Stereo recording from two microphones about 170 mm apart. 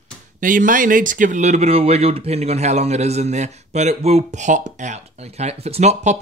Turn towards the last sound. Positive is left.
turn(degrees=-40)  # may be behind; listen again after turning